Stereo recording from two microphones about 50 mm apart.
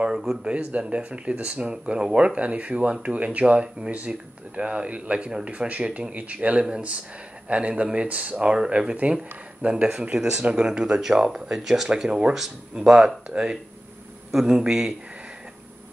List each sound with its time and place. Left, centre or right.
0.0 s speech: centre
0.4 s speech: right